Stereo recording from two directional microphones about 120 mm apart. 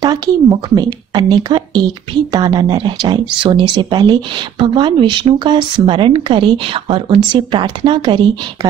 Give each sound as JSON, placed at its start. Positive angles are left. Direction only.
{"t": 0.0, "sound": "speech", "side_deg": -35}